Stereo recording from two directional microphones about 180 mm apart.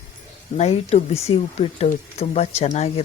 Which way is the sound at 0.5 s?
35° left (ahead or behind).